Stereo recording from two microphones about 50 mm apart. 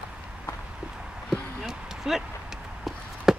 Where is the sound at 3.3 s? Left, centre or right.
Centre.